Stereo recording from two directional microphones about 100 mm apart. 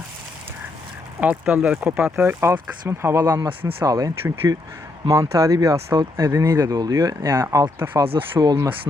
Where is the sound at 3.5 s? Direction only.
65° right (ahead or behind).